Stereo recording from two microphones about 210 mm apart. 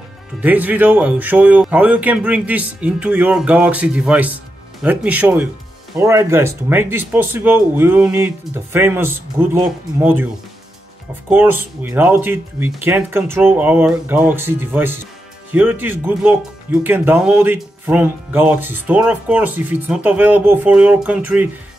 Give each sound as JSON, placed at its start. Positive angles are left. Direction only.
{"t": 0.4, "sound": "speech", "side_deg": -10}